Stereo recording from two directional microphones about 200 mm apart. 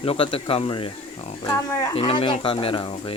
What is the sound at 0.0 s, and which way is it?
Speech, 30° left (ahead or behind).